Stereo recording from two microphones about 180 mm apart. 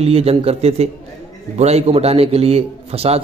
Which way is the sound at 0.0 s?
35° right (ahead or behind).